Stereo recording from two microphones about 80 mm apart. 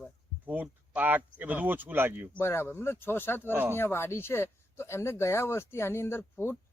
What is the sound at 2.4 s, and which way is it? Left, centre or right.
Speech, left.